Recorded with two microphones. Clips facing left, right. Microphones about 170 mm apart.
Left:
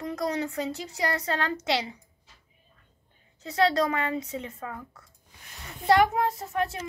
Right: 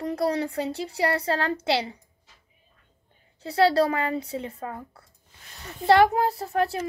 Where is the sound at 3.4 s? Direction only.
30° right (ahead or behind).